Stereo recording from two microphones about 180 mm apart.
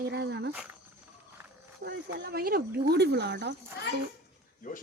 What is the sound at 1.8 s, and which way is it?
Speech, 65° right (ahead or behind).